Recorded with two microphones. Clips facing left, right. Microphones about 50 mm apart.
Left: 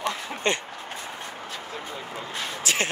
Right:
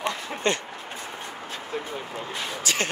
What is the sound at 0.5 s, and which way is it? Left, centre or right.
Speech, left.